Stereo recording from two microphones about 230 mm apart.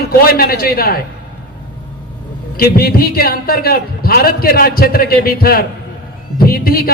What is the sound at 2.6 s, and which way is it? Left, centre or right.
A man's voice, left.